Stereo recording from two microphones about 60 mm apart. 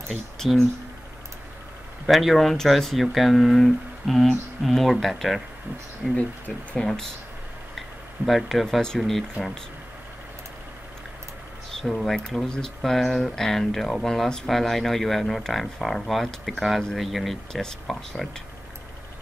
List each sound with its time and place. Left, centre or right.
2.0 s speech: centre
6.1 s speech: left
6.8 s speech: centre
8.3 s speech: centre
11.7 s speech: centre